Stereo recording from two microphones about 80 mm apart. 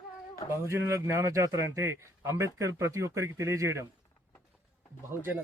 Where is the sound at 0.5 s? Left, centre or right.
Right.